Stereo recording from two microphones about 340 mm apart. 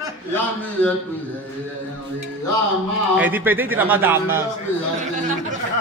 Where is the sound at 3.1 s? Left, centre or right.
Centre.